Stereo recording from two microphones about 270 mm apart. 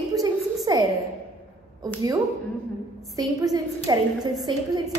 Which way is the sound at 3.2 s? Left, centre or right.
Centre.